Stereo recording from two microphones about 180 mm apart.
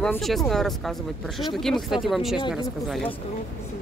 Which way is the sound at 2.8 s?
Centre (ahead or behind).